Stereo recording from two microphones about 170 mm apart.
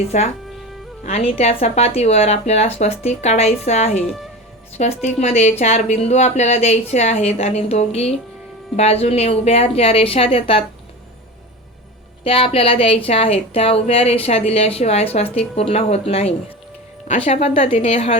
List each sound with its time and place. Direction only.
0.1 s speech: 45° left (ahead or behind)
4.0 s speech: centre (ahead or behind)
5.0 s speech: 40° left (ahead or behind)
12.2 s speech: 35° left (ahead or behind)